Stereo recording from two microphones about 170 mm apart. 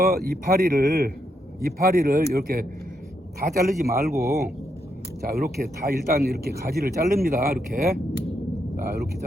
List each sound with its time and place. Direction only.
0.1 s speech: 65° right (ahead or behind)
4.1 s speech: 15° right (ahead or behind)
5.3 s speech: 60° right (ahead or behind)